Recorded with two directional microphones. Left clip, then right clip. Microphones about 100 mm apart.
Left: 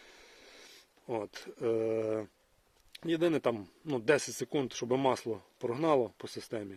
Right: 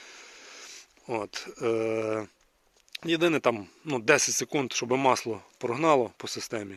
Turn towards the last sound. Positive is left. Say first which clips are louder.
# right 6 dB
turn(degrees=-15)  # may be behind; listen again after turning